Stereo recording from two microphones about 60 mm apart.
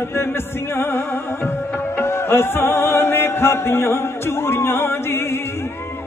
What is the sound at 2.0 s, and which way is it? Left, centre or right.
Music, left.